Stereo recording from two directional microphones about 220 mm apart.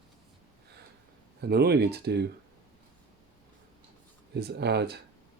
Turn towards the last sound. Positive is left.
turn(degrees=-50)  # may be behind; listen again after turning